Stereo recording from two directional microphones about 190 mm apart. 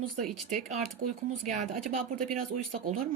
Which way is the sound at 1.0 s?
50° right (ahead or behind).